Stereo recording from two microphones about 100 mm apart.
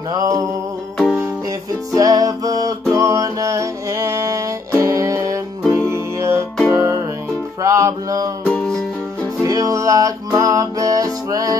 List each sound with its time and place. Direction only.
0.1 s a sound: 40° right (ahead or behind)
0.9 s music: centre (ahead or behind)
2.0 s music: 35° right (ahead or behind)
8.5 s music: 10° left (ahead or behind)
9.4 s music: 35° right (ahead or behind)